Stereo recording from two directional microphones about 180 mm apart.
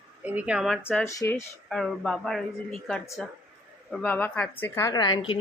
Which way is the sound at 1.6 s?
Centre (ahead or behind).